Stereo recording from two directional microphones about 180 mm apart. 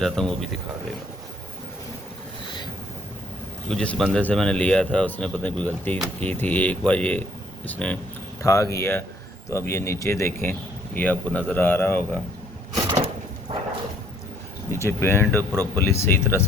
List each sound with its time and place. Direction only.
0.0 s speech: centre (ahead or behind)
3.7 s speech: 5° left (ahead or behind)
12.7 s sewing machine: 25° right (ahead or behind)
14.7 s speech: 15° left (ahead or behind)